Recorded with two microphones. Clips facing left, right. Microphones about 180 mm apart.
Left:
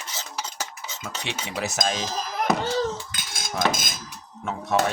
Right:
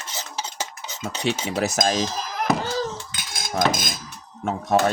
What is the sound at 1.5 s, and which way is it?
Speech, 40° right (ahead or behind).